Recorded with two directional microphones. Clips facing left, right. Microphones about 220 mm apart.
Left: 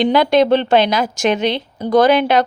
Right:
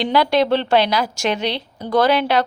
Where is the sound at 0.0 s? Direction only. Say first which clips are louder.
Left 4 dB; 20° left (ahead or behind).